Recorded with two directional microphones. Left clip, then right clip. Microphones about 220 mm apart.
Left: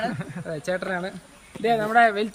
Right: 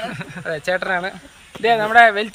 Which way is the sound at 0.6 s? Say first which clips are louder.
Right 7 dB; 15° right (ahead or behind).